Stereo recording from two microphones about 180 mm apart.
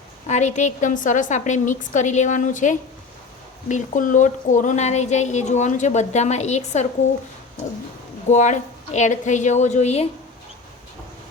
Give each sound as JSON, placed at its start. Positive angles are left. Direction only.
{"t": 0.3, "sound": "a woman's voice", "side_deg": 40}
{"t": 8.3, "sound": "a woman's voice", "side_deg": 40}